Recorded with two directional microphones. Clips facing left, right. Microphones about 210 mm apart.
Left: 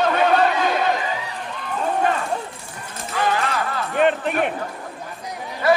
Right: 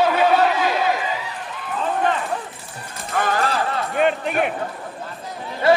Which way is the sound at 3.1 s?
50° right (ahead or behind).